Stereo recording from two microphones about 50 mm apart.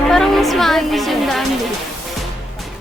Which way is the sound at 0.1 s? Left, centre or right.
Centre.